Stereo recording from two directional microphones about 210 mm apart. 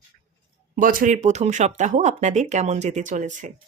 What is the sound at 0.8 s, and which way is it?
Speech, 40° right (ahead or behind).